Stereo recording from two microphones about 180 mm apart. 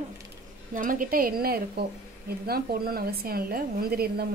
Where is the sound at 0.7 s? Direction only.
50° right (ahead or behind).